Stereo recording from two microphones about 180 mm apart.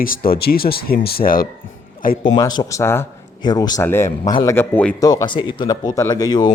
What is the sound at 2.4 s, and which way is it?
Speech, 20° left (ahead or behind).